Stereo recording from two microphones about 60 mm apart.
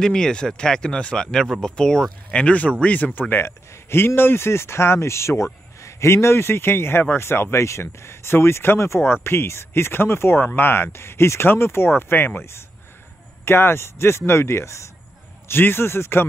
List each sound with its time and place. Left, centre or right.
0.0 s speech: centre
2.3 s speech: left
3.4 s speech: left
7.5 s speech: left
12.4 s speech: left
15.4 s speech: left